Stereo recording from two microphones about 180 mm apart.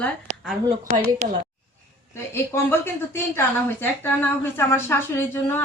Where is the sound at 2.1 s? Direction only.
15° left (ahead or behind).